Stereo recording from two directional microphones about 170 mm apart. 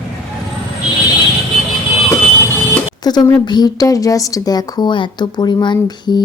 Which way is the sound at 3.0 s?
25° left (ahead or behind).